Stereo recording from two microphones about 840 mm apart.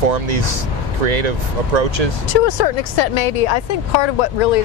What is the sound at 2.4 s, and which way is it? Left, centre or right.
Speech, left.